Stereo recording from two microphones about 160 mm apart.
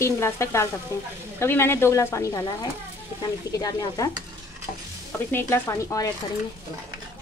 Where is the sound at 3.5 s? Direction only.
25° left (ahead or behind).